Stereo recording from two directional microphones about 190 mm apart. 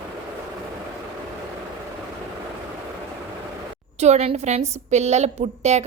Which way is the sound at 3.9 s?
35° right (ahead or behind).